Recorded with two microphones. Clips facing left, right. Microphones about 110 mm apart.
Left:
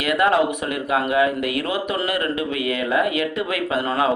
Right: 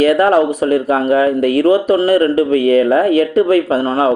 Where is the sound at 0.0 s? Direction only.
35° right (ahead or behind).